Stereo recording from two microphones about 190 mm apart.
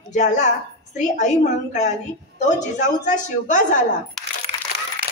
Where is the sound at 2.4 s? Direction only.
40° left (ahead or behind).